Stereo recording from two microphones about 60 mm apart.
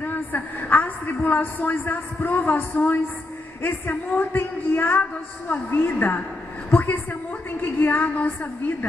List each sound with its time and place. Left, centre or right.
0.0 s a woman's voice: left
6.7 s a sound: left
7.8 s a woman's voice: left